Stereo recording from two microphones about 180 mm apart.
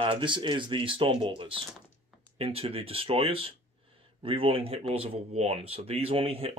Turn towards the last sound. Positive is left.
turn(degrees=-30)  # may be behind; listen again after turning